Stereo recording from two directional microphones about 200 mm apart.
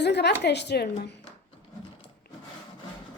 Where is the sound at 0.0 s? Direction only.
60° left (ahead or behind).